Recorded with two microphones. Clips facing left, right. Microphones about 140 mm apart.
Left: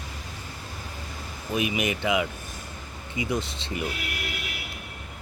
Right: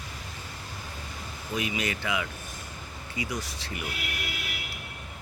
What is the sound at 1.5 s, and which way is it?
Speech, 20° left (ahead or behind).